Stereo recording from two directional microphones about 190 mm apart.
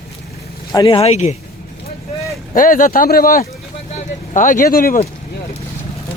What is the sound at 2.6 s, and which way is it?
Speech, 45° left (ahead or behind).